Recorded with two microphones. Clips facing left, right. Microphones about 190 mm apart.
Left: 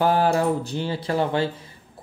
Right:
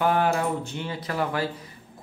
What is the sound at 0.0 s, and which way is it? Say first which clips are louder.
Speech: left 3 dB; 35° left (ahead or behind).